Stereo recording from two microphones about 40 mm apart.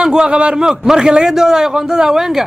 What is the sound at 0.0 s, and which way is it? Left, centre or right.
A man's voice, centre.